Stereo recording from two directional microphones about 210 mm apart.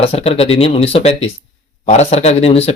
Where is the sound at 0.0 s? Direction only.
30° left (ahead or behind).